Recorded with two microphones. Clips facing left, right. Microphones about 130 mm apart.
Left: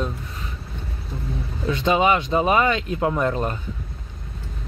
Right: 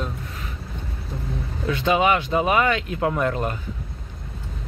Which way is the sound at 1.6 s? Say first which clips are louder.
Left 1 dB; 25° left (ahead or behind).